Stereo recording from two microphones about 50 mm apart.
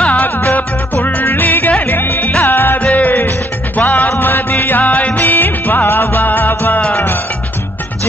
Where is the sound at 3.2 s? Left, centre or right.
Left.